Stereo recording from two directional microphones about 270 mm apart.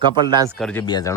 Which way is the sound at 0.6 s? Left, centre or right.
Centre.